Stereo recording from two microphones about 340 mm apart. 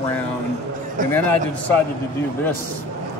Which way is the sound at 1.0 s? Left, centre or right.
Right.